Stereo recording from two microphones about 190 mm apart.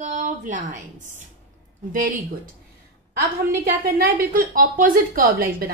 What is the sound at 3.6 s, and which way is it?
A woman's voice, 50° right (ahead or behind).